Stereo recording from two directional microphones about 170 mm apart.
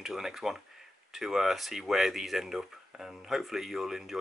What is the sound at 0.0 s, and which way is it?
Speech, centre (ahead or behind).